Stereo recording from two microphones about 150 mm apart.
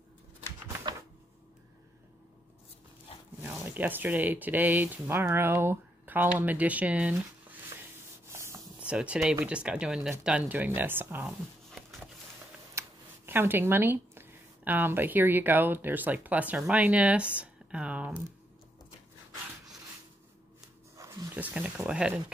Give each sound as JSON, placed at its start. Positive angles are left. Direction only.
{"t": 3.4, "sound": "speech", "side_deg": -10}
{"t": 8.3, "sound": "rub", "side_deg": -20}
{"t": 8.7, "sound": "speech", "side_deg": -10}
{"t": 11.2, "sound": "a sound", "side_deg": 0}
{"t": 12.7, "sound": "speech", "side_deg": -15}
{"t": 21.0, "sound": "roaring cats", "side_deg": -20}
{"t": 21.4, "sound": "speech", "side_deg": -10}